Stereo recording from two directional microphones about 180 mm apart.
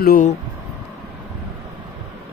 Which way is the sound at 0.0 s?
55° left (ahead or behind).